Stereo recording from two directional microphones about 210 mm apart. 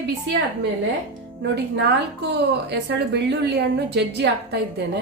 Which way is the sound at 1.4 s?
55° right (ahead or behind).